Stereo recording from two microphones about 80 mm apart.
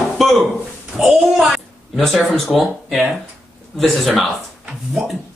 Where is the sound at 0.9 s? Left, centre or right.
Centre.